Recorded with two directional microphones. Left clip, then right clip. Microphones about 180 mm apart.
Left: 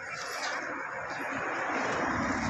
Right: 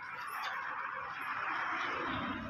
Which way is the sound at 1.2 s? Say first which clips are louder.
Left 4 dB; 45° left (ahead or behind).